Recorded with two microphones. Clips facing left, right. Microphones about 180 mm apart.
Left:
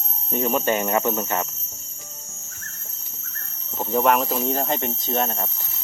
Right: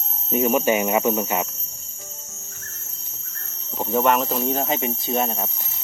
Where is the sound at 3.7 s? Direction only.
Centre (ahead or behind).